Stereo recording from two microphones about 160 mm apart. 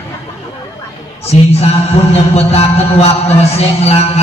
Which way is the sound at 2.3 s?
40° left (ahead or behind).